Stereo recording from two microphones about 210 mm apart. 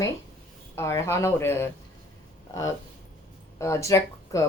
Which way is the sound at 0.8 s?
10° left (ahead or behind).